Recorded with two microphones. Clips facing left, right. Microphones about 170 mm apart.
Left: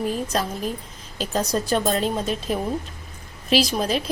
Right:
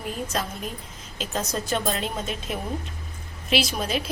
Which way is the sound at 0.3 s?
35° left (ahead or behind).